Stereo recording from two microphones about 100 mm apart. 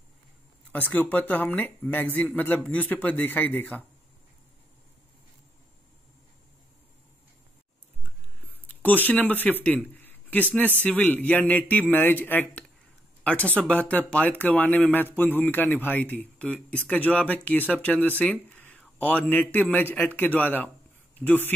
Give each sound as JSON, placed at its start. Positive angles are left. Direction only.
{"t": 0.7, "sound": "speech", "side_deg": 15}
{"t": 8.6, "sound": "speech", "side_deg": 15}
{"t": 9.9, "sound": "a sound", "side_deg": 20}
{"t": 10.5, "sound": "speech", "side_deg": 15}